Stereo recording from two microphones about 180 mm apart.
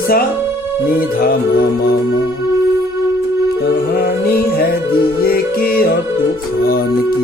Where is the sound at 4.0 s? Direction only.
60° left (ahead or behind).